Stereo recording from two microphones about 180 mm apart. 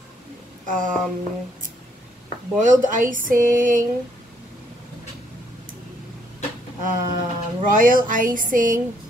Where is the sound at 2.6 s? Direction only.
45° right (ahead or behind).